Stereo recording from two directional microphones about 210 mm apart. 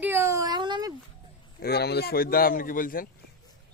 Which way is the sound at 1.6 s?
50° left (ahead or behind).